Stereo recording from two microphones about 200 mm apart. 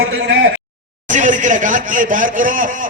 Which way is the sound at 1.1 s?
40° right (ahead or behind).